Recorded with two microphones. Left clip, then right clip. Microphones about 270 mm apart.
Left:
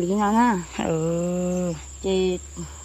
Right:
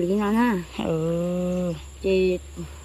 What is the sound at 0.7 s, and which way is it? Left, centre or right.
Speech, centre.